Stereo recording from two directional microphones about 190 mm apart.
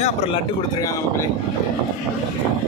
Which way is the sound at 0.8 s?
15° left (ahead or behind).